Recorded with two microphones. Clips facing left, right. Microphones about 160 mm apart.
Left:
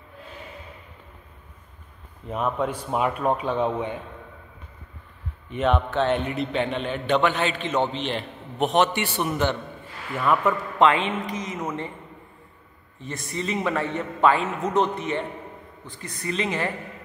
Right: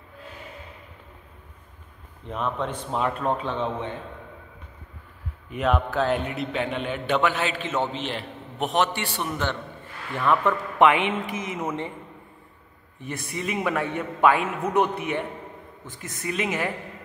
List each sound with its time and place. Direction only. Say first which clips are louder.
2.2 s a man's voice: left 3 dB; 5° left (ahead or behind)
5.5 s a man's voice: left 1 dB; centre (ahead or behind)
8.8 s a man's voice: left 3 dB; 20° left (ahead or behind)
10.8 s a man's voice: right 1 dB; 20° right (ahead or behind)
13.0 s a man's voice: left 1 dB; 10° right (ahead or behind)